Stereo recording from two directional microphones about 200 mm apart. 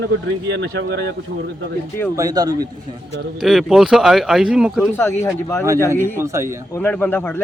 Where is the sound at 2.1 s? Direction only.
20° right (ahead or behind).